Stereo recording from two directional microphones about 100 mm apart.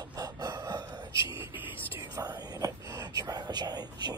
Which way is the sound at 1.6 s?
25° right (ahead or behind).